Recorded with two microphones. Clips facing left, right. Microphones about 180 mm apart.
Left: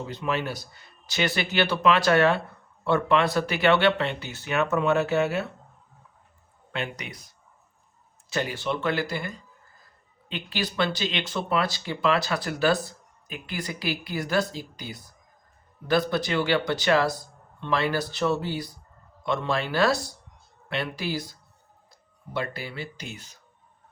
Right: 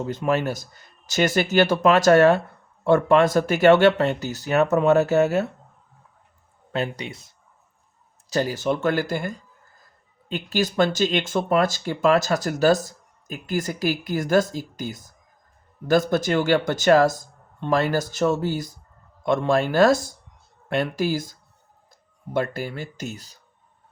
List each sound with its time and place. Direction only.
0.0 s speech: 45° right (ahead or behind)
6.7 s speech: 35° right (ahead or behind)
8.3 s speech: 40° right (ahead or behind)